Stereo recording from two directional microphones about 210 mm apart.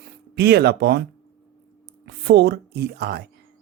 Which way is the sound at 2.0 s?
50° right (ahead or behind).